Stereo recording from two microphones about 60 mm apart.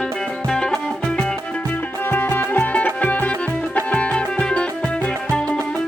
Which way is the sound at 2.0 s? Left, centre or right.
Left.